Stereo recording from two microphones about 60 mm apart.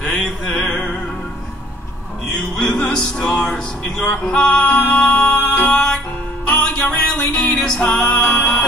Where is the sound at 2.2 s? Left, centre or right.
Centre.